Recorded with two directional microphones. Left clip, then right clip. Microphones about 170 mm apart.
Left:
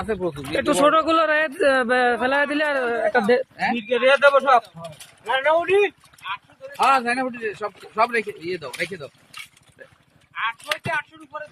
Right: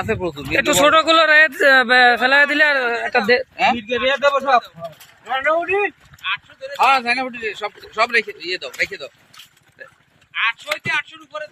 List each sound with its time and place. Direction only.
0.0 s speech: 30° right (ahead or behind)
0.5 s a man's voice: centre (ahead or behind)
3.5 s speech: 25° right (ahead or behind)
3.8 s speech: 5° left (ahead or behind)
5.2 s speech: 55° left (ahead or behind)
6.7 s speech: 40° left (ahead or behind)
10.9 s speech: 65° left (ahead or behind)